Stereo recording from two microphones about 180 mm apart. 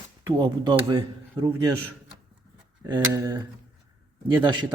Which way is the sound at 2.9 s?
20° right (ahead or behind).